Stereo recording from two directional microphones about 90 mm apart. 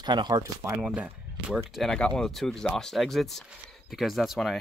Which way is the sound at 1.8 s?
10° left (ahead or behind).